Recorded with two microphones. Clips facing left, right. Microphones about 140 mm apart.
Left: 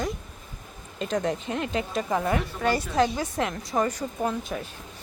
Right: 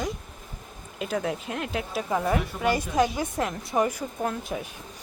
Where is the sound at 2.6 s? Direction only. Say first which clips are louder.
Even; 15° right (ahead or behind).